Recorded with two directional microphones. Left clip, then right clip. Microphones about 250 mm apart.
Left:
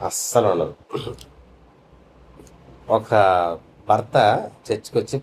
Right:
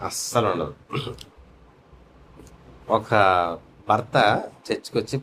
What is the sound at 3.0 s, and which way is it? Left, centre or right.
Speech, right.